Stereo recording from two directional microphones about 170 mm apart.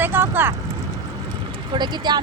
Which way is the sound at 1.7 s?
25° right (ahead or behind).